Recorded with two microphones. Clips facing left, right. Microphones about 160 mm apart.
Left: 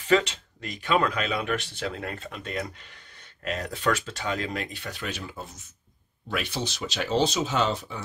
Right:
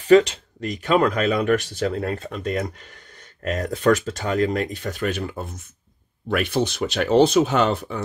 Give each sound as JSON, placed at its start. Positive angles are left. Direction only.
{"t": 0.1, "sound": "speech", "side_deg": -40}